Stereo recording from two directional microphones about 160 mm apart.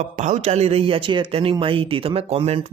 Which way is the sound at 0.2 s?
45° right (ahead or behind).